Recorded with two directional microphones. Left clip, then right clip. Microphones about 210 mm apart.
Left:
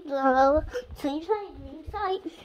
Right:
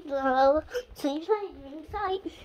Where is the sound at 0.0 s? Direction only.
5° left (ahead or behind).